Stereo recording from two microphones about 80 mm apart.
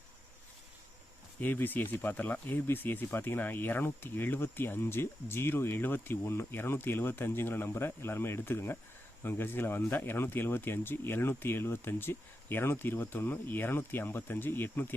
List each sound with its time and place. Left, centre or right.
1.4 s speech: left